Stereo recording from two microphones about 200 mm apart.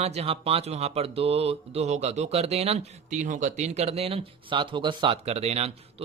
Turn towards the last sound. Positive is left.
turn(degrees=-30)  # may be behind; listen again after turning